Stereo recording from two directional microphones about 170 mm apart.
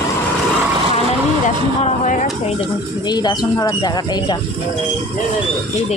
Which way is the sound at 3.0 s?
25° left (ahead or behind).